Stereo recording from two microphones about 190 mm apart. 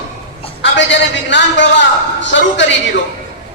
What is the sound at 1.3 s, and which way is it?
A man's voice, 70° left (ahead or behind).